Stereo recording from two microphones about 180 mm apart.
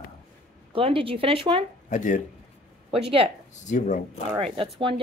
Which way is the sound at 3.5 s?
40° left (ahead or behind).